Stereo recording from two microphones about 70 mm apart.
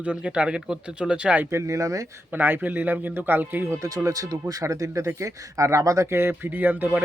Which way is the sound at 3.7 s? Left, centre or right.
Right.